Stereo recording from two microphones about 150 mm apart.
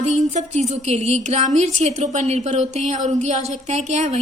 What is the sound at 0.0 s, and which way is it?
A woman's voice, 50° right (ahead or behind).